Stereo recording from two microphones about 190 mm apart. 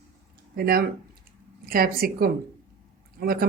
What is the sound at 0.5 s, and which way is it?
Speech, 50° right (ahead or behind).